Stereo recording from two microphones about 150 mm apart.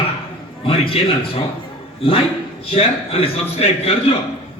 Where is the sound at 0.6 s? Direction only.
40° left (ahead or behind).